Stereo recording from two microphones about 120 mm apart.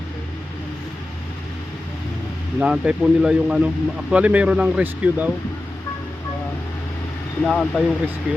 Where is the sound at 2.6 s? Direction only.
10° right (ahead or behind).